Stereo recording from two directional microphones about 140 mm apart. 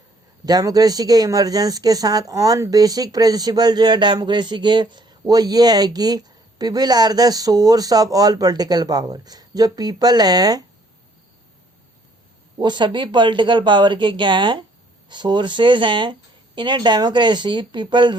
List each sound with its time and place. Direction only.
0.4 s speech: 25° right (ahead or behind)
12.5 s speech: 30° right (ahead or behind)